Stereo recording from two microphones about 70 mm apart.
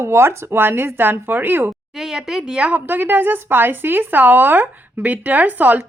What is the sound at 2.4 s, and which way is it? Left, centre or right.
A woman's voice, centre.